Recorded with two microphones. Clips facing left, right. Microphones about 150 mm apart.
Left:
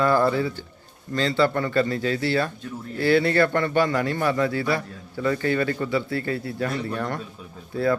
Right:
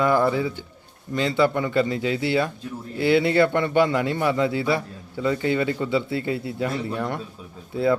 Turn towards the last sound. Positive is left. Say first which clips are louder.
# right 2 dB
turn(degrees=-20)  # may be behind; listen again after turning